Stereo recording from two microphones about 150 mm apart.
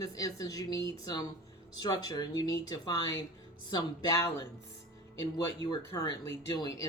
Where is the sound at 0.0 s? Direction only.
25° left (ahead or behind).